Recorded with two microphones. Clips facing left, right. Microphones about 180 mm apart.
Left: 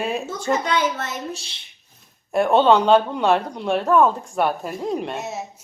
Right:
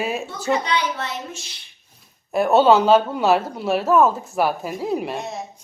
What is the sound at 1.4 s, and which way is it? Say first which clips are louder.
Speech: right 3 dB; 30° left (ahead or behind).